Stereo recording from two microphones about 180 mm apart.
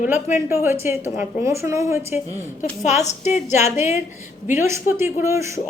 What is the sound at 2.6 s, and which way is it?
A woman's voice, 40° left (ahead or behind).